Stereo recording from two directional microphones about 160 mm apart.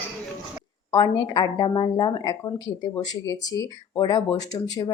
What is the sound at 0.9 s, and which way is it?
Speech, 30° left (ahead or behind).